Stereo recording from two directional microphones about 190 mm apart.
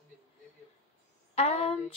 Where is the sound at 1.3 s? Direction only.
30° left (ahead or behind).